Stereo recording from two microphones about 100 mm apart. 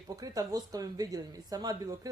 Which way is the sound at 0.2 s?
35° right (ahead or behind).